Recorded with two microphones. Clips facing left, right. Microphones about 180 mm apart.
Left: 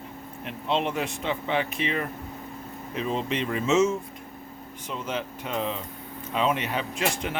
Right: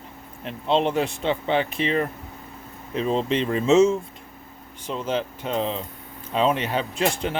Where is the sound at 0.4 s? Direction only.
30° right (ahead or behind).